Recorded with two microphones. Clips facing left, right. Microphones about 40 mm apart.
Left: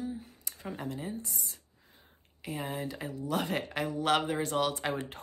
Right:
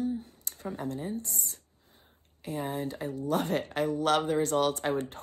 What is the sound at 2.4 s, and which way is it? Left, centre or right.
Speech, left.